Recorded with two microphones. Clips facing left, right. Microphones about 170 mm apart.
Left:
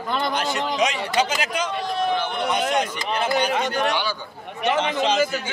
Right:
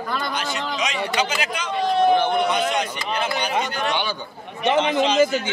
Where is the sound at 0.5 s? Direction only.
50° left (ahead or behind).